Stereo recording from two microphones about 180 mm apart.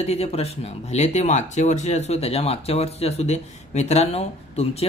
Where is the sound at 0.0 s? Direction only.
35° left (ahead or behind).